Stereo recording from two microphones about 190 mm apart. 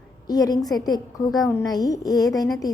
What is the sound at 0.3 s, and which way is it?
A woman's voice, 20° left (ahead or behind).